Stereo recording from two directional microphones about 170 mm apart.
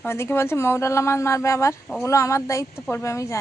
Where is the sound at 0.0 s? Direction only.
15° left (ahead or behind).